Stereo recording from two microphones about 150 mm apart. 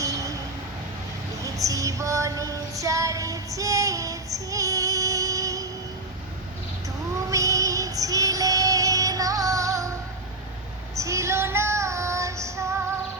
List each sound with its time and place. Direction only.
0.0 s a sound: 20° right (ahead or behind)
1.4 s music: 20° right (ahead or behind)
7.2 s music: 20° right (ahead or behind)
10.9 s female singing: 20° right (ahead or behind)